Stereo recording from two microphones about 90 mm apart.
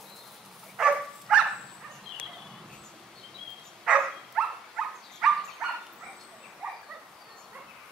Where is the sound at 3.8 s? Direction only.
5° right (ahead or behind).